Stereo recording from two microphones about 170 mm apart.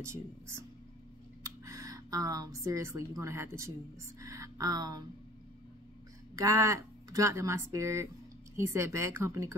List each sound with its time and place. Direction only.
0.0 s speech: 15° right (ahead or behind)
6.3 s speech: 20° right (ahead or behind)